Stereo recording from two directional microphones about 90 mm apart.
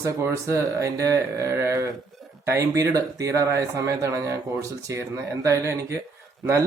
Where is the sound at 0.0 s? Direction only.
30° right (ahead or behind).